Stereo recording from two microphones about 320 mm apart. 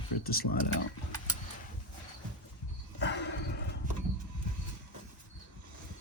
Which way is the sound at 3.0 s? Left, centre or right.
Left.